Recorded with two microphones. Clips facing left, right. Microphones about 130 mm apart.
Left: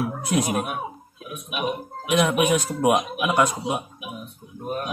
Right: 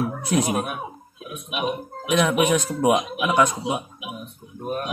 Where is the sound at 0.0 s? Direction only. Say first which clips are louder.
Right 1 dB; 5° left (ahead or behind).